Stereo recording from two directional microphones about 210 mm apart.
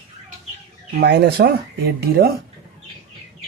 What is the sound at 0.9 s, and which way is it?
Speech, 50° right (ahead or behind).